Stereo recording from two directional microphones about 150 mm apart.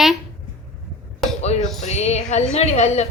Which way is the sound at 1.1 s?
45° left (ahead or behind).